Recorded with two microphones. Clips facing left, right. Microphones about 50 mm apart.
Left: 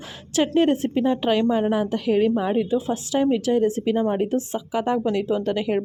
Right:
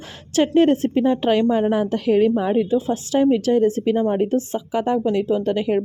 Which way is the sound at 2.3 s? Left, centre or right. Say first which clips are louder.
Right 3 dB; centre.